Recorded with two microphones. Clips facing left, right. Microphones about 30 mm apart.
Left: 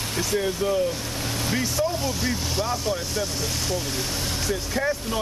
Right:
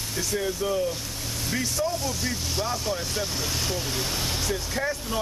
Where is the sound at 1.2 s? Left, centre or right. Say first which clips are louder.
Left 5 dB; left.